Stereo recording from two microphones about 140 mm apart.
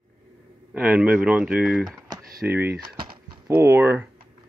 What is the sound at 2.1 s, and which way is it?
Computer keyboard, 25° right (ahead or behind).